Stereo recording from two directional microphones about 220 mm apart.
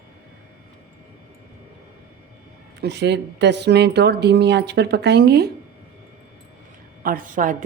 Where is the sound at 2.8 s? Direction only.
50° right (ahead or behind).